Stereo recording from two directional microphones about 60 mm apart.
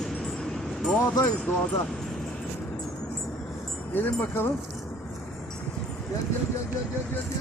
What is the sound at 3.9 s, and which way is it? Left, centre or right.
Speech, left.